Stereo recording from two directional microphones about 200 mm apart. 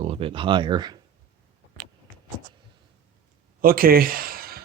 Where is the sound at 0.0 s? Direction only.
30° right (ahead or behind).